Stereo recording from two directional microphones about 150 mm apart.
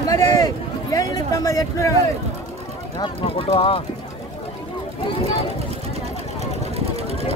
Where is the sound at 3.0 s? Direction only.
35° left (ahead or behind).